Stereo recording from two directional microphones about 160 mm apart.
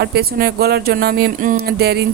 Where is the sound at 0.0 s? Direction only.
85° right.